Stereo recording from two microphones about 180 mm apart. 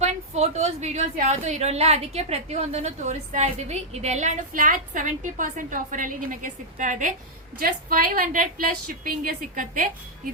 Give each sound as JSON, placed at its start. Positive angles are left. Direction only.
{"t": 0.0, "sound": "a woman's voice", "side_deg": -40}